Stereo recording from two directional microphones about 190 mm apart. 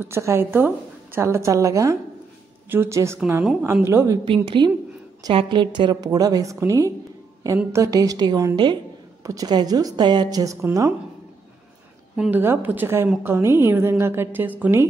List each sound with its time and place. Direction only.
0.0 s a woman's voice: 15° right (ahead or behind)
12.2 s a woman's voice: 10° right (ahead or behind)